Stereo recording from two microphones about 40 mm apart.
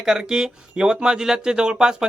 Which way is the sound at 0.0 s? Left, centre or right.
Centre.